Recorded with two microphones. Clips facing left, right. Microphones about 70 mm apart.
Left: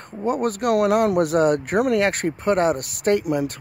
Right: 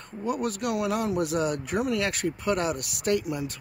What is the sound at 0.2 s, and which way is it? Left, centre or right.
Speech, left.